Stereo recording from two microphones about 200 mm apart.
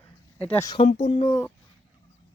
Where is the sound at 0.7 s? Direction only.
35° left (ahead or behind).